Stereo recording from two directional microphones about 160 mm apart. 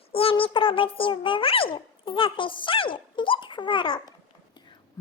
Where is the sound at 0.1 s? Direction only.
35° left (ahead or behind).